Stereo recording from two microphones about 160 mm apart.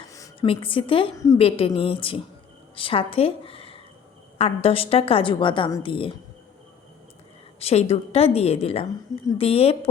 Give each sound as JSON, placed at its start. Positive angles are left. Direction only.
{"t": 0.3, "sound": "a woman's voice", "side_deg": 35}
{"t": 1.1, "sound": "a woman's voice", "side_deg": 20}
{"t": 1.4, "sound": "a woman's voice", "side_deg": 35}
{"t": 7.6, "sound": "a woman's voice", "side_deg": 40}